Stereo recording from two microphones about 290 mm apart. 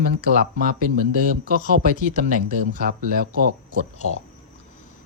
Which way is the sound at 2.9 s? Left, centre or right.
Right.